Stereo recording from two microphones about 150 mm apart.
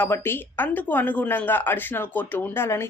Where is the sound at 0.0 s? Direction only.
15° left (ahead or behind).